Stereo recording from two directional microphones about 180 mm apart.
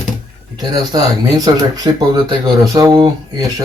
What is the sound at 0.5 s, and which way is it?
Speech, 20° right (ahead or behind).